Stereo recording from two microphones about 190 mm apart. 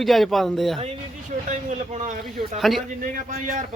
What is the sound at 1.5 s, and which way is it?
Speech, 40° right (ahead or behind).